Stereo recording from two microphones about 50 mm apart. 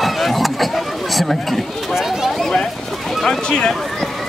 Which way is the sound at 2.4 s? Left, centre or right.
Centre.